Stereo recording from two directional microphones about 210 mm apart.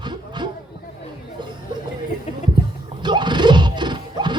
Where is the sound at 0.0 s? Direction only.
20° right (ahead or behind).